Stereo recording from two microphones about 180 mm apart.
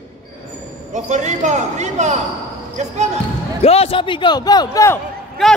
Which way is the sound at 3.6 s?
35° left (ahead or behind).